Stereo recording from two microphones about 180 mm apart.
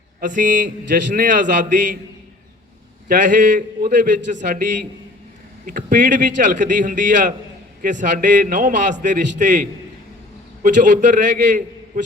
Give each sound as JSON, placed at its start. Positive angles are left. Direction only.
{"t": 0.2, "sound": "a man's voice", "side_deg": -45}
{"t": 3.1, "sound": "a man's voice", "side_deg": -45}